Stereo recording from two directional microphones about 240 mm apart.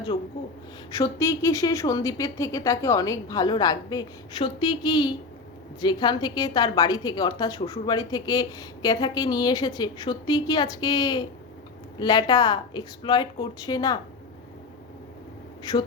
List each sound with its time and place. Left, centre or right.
0.9 s a woman's voice: centre
15.7 s a woman's voice: centre